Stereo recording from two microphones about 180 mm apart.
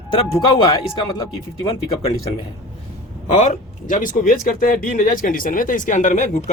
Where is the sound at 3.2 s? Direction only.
40° left (ahead or behind).